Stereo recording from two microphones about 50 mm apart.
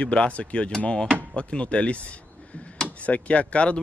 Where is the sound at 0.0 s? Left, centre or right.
Left.